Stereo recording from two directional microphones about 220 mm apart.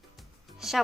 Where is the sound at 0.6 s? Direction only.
Centre (ahead or behind).